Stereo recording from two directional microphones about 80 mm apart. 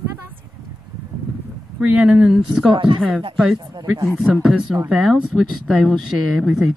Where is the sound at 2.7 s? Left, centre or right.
Right.